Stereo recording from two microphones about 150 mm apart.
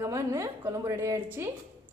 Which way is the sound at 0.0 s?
20° right (ahead or behind).